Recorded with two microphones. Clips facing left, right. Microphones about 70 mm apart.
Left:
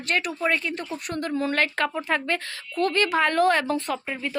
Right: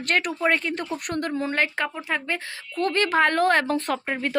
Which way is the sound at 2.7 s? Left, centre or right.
Right.